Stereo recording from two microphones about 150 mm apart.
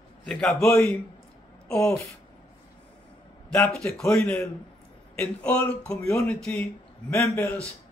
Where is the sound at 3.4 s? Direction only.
5° left (ahead or behind).